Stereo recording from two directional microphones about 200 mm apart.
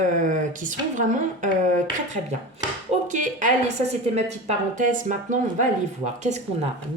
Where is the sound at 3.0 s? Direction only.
40° right (ahead or behind).